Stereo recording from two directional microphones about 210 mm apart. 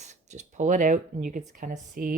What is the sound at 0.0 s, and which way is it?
Speech, 35° right (ahead or behind).